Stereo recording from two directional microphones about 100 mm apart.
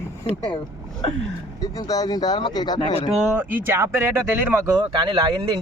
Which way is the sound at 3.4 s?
25° right (ahead or behind).